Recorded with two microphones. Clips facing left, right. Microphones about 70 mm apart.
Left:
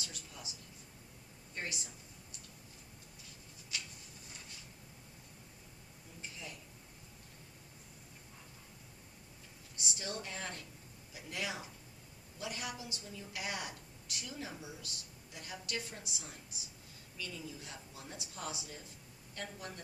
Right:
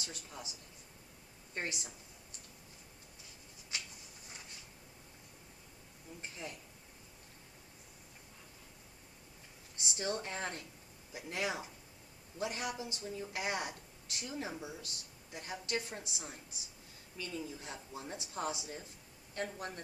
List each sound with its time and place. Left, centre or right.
0.0 s a woman's voice: right
1.5 s a woman's voice: right
6.4 s a woman's voice: right
10.0 s a woman's voice: right